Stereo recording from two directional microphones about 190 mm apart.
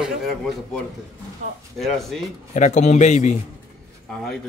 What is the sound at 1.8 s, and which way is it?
Speech, centre (ahead or behind).